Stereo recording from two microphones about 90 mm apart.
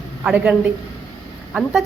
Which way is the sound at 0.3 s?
15° right (ahead or behind).